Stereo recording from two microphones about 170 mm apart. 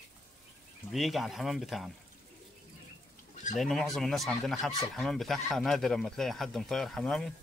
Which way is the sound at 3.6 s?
Centre (ahead or behind).